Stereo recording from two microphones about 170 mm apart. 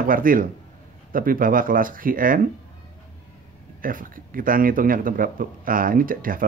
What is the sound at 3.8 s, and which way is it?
Speech, 55° right (ahead or behind).